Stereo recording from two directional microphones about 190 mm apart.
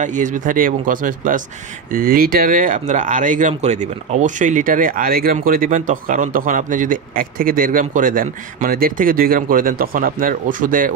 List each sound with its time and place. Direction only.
0.0 s speech: 40° right (ahead or behind)